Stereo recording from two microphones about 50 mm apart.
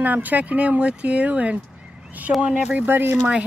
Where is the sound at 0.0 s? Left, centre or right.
Right.